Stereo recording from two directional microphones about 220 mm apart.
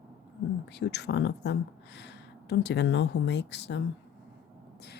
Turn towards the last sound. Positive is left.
turn(degrees=50)  # may be behind; listen again after turning